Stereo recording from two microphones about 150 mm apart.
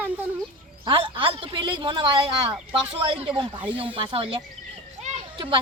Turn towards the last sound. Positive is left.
turn(degrees=-35)  # may be behind; listen again after turning